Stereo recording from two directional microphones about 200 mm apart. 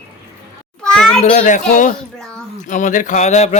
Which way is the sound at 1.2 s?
35° left (ahead or behind).